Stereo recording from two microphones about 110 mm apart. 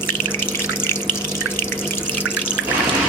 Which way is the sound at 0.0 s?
20° left (ahead or behind).